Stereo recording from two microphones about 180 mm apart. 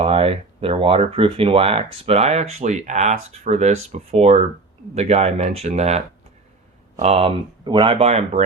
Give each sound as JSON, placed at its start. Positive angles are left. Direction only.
{"t": 0.0, "sound": "speech", "side_deg": -35}
{"t": 7.0, "sound": "speech", "side_deg": -35}